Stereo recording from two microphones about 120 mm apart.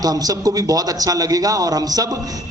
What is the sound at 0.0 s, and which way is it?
A man's voice, 30° right (ahead or behind).